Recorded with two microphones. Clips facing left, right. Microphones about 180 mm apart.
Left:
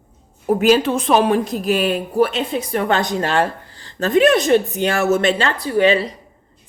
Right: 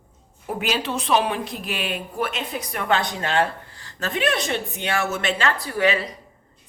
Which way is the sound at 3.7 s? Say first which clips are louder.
Left 9 dB; 30° left (ahead or behind).